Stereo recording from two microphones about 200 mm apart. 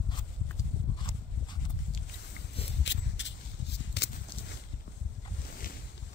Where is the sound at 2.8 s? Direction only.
65° left (ahead or behind).